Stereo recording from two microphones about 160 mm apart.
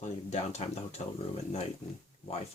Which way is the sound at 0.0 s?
45° left (ahead or behind).